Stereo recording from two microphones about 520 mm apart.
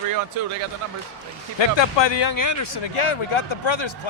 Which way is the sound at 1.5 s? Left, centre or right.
Left.